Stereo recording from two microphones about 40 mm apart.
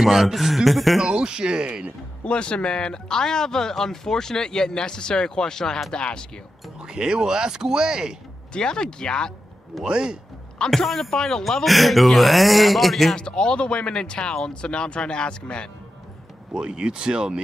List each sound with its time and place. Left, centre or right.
0.0 s speech: centre
1.0 s speech: right
2.2 s speech: left
6.8 s speech: centre
8.5 s speech: left
9.8 s speech: right
10.9 s speech: centre
13.1 s speech: left
16.5 s speech: right